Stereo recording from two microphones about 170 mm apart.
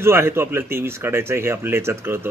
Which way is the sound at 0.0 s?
15° right (ahead or behind).